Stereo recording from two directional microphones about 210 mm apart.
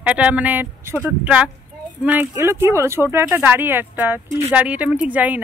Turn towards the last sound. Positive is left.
turn(degrees=-5)  # may be behind; listen again after turning